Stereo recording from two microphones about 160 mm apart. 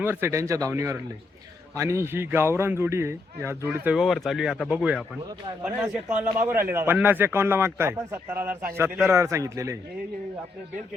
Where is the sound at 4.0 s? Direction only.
Centre (ahead or behind); by 9.8 s 20° right (ahead or behind).